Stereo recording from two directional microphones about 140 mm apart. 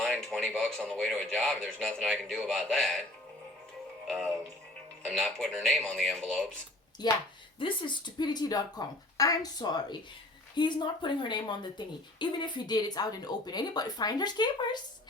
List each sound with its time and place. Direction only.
0.0 s speech: 5° left (ahead or behind)
5.0 s speech: 5° left (ahead or behind)
7.0 s a woman's voice: 30° left (ahead or behind)